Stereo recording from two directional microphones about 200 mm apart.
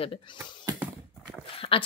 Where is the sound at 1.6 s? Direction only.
25° left (ahead or behind).